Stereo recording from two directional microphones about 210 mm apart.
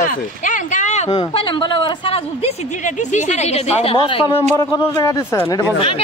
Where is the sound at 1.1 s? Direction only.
20° left (ahead or behind).